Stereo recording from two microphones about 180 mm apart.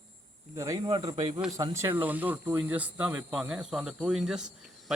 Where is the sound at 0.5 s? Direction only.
20° right (ahead or behind).